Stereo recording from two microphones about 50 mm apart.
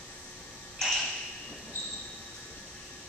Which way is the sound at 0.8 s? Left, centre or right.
Centre.